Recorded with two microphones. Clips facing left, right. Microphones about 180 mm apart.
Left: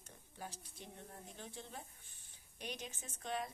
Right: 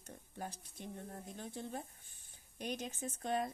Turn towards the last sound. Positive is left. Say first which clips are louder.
# right 6 dB
turn(degrees=-45)  # may be behind; listen again after turning